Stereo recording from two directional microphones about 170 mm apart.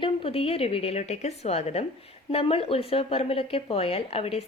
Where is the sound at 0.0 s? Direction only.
35° left (ahead or behind).